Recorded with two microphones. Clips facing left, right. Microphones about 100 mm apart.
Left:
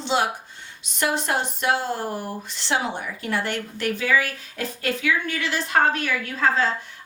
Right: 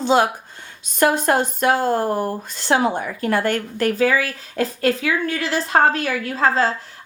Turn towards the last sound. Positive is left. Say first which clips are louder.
# right 3 dB
turn(degrees=-35)  # may be behind; listen again after turning